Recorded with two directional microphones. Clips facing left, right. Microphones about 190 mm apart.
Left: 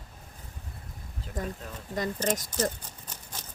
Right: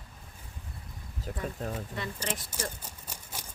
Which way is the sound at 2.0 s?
40° left (ahead or behind).